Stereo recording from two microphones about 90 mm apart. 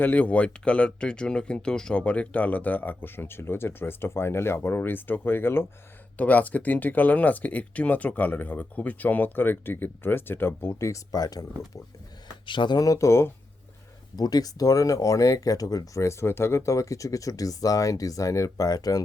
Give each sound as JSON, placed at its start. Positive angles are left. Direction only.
{"t": 0.0, "sound": "speech", "side_deg": 20}
{"t": 12.5, "sound": "speech", "side_deg": 60}
{"t": 12.8, "sound": "speech", "side_deg": 35}
{"t": 14.2, "sound": "speech", "side_deg": 45}